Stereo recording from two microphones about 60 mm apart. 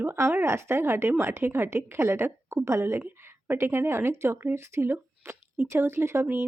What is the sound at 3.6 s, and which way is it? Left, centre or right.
A woman's voice, right.